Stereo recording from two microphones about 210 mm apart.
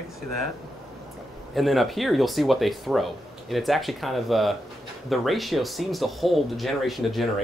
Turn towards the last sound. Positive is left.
turn(degrees=0)  # may be behind; listen again after turning